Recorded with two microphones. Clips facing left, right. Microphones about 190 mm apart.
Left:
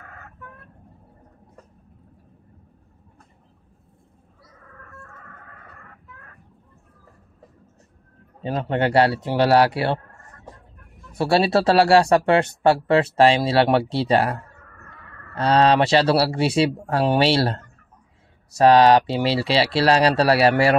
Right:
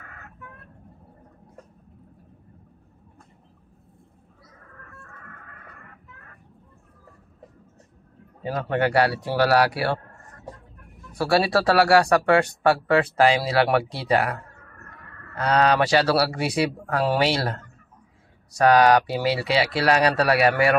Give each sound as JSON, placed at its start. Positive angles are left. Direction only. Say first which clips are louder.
{"t": 8.4, "sound": "speech", "louder": "left 1 dB", "side_deg": 25}
{"t": 11.1, "sound": "speech", "louder": "left 2 dB", "side_deg": 25}